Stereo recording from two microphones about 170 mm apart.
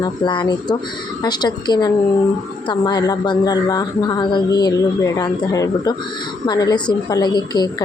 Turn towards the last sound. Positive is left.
turn(degrees=25)  # may be behind; listen again after turning